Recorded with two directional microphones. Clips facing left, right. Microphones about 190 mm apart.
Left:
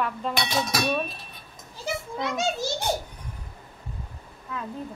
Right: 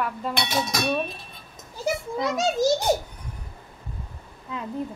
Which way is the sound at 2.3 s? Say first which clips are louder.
Right 7 dB; 40° right (ahead or behind).